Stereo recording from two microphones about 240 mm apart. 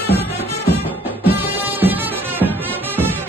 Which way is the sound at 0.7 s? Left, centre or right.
Centre.